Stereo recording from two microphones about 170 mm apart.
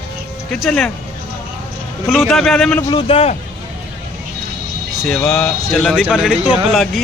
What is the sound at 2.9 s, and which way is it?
Speech, 35° left (ahead or behind).